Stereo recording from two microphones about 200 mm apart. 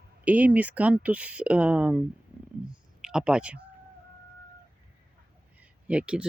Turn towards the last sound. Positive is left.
turn(degrees=-5)  # may be behind; listen again after turning